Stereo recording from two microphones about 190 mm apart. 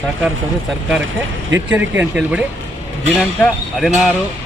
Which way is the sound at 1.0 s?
80° right.